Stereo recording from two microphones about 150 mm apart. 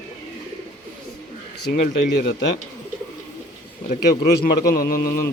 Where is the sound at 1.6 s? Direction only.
85° left.